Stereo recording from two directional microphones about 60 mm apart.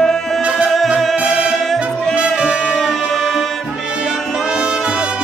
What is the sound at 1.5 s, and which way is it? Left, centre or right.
Music, centre.